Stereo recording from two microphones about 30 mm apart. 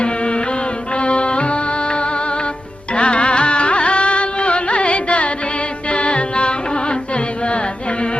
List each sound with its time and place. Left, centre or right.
0.0 s music: left